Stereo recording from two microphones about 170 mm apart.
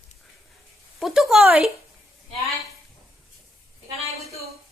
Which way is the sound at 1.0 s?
5° right (ahead or behind).